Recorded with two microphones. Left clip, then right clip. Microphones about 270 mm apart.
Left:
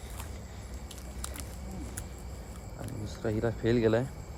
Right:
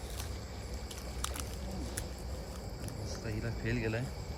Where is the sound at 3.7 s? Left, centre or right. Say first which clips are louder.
Left 11 dB; left.